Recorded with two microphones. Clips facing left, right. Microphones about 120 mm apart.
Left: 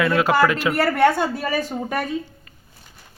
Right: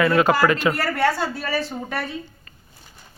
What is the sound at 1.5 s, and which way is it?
Speech, 45° left (ahead or behind).